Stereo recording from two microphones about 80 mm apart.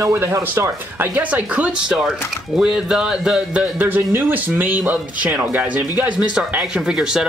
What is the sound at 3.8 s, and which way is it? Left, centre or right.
Speech, right.